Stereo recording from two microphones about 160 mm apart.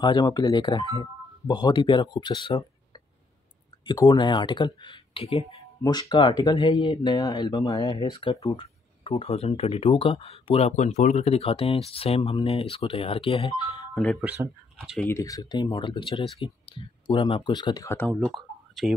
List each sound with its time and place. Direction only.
0.0 s speech: 25° left (ahead or behind)
3.8 s speech: 25° left (ahead or behind)
15.0 s speech: 15° left (ahead or behind)
17.9 s speech: 5° left (ahead or behind)